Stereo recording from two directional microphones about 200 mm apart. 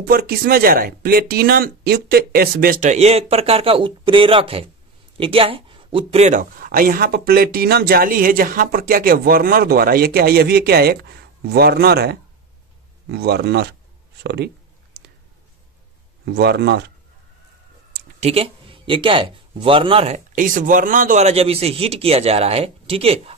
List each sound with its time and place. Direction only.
0.0 s speech: 50° right (ahead or behind)
15.0 s a sound: 50° right (ahead or behind)
16.3 s speech: 55° right (ahead or behind)
18.2 s a man's voice: 30° right (ahead or behind)
20.3 s speech: 40° right (ahead or behind)